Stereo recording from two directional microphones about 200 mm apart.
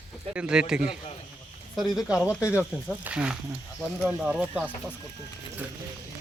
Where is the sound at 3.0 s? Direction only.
5° right (ahead or behind).